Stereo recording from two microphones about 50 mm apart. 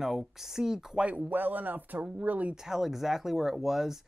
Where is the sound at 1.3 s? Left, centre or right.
Right.